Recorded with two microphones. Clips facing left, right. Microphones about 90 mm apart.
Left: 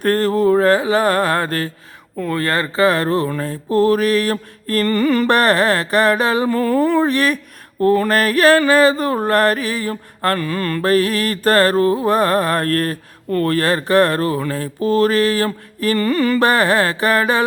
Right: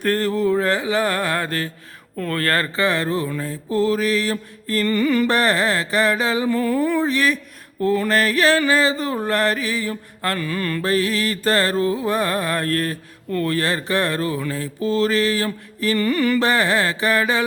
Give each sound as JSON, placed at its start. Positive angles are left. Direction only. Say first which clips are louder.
{"t": 0.0, "sound": "mantra", "louder": "left 4 dB", "side_deg": 40}
{"t": 2.1, "sound": "speech", "louder": "left 2 dB", "side_deg": 15}
{"t": 2.7, "sound": "mantra", "louder": "left 5 dB", "side_deg": 40}
{"t": 16.4, "sound": "mantra", "louder": "left 4 dB", "side_deg": 50}